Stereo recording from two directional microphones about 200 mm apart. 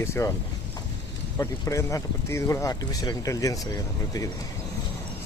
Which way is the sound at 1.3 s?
15° left (ahead or behind).